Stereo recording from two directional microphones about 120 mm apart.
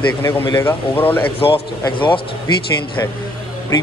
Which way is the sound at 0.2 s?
20° left (ahead or behind).